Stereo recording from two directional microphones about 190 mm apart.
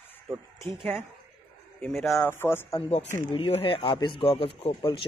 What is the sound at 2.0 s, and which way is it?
Speech, centre (ahead or behind).